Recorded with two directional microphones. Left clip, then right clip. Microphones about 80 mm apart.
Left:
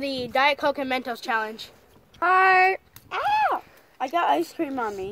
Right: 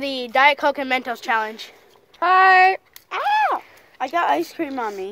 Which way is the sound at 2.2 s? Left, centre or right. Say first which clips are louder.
Right 5 dB; left.